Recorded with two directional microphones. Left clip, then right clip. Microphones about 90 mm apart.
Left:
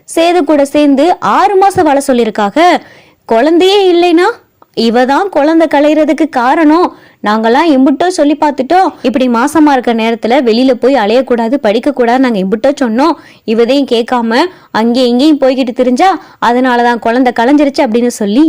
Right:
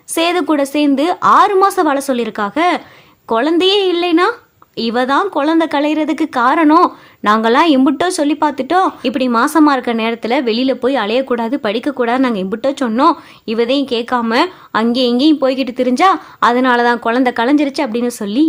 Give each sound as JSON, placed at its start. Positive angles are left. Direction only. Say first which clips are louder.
{"t": 0.1, "sound": "a woman's voice", "louder": "left 6 dB", "side_deg": 35}
{"t": 3.3, "sound": "a woman's voice", "louder": "left 6 dB", "side_deg": 50}
{"t": 8.4, "sound": "a woman's voice", "louder": "left 5 dB", "side_deg": 40}